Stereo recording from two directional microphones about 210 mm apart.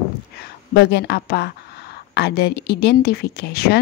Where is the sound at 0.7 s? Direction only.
50° left (ahead or behind).